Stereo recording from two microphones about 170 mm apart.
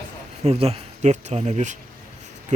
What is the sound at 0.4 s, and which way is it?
Speech, 40° right (ahead or behind).